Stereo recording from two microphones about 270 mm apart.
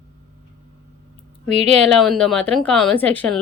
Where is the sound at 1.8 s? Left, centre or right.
Centre.